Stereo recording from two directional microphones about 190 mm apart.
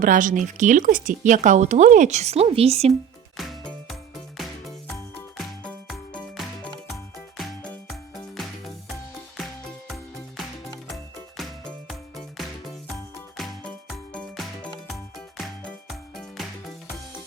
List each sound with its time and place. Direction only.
0.0 s speech: 45° right (ahead or behind)
3.3 s music: centre (ahead or behind)
5.6 s music: centre (ahead or behind)
11.9 s music: centre (ahead or behind)